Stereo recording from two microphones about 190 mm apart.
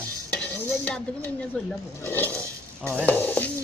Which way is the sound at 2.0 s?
10° left (ahead or behind).